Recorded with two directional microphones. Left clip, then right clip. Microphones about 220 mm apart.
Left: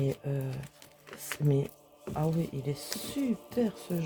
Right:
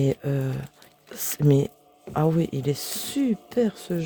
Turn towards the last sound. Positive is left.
turn(degrees=-50)  # may be behind; listen again after turning